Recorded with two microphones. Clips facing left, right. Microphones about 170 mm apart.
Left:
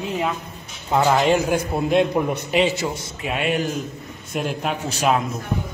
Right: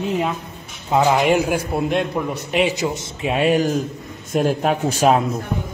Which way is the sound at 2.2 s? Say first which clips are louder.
Left 2 dB; 15° left (ahead or behind).